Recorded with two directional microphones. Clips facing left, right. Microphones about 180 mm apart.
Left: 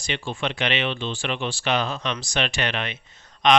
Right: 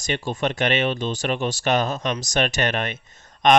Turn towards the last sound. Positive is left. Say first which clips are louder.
# right 2 dB
turn(degrees=-45)  # may be behind; listen again after turning